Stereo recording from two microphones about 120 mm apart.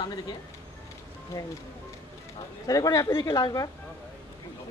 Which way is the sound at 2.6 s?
30° left (ahead or behind).